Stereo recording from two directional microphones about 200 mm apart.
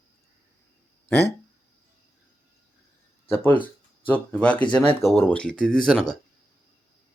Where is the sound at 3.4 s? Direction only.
10° left (ahead or behind).